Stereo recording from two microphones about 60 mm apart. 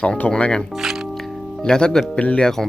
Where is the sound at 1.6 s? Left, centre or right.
Centre.